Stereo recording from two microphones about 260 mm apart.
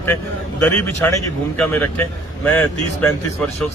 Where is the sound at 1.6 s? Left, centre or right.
Centre.